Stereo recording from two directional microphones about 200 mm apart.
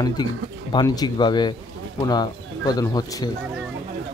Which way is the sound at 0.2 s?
20° left (ahead or behind).